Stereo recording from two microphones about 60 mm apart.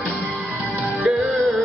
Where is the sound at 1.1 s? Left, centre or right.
Centre.